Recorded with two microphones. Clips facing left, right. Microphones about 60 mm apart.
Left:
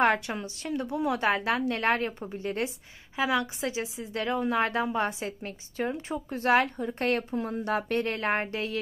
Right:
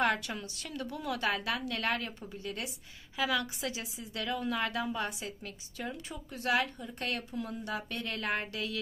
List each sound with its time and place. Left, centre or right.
0.0 s a woman's voice: left